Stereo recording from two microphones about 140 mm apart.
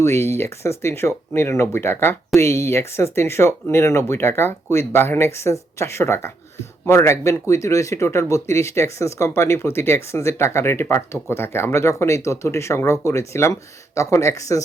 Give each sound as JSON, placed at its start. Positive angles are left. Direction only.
{"t": 0.0, "sound": "speech", "side_deg": 20}